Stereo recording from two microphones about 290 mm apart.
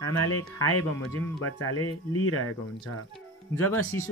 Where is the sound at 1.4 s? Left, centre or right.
Left.